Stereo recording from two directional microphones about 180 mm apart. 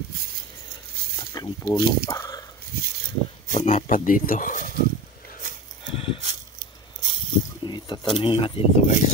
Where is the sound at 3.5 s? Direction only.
40° left (ahead or behind).